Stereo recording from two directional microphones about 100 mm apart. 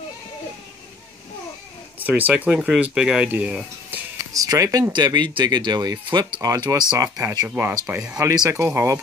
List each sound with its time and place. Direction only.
2.0 s speech: 15° right (ahead or behind)
4.3 s speech: 35° right (ahead or behind)
4.9 s speech: 50° right (ahead or behind)
6.4 s speech: 35° right (ahead or behind)
7.4 s speech: 20° right (ahead or behind)